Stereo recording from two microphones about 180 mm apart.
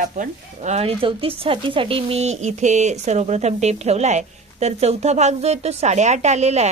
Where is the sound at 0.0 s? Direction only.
45° right (ahead or behind).